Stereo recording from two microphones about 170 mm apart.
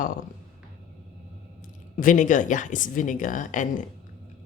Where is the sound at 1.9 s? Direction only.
50° left (ahead or behind).